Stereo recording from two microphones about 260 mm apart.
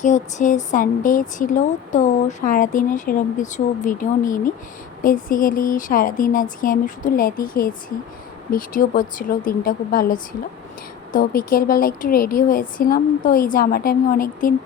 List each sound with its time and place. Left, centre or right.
0.0 s speech: left